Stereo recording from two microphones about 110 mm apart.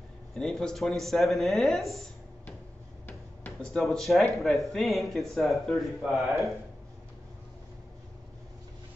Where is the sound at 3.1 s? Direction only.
15° left (ahead or behind).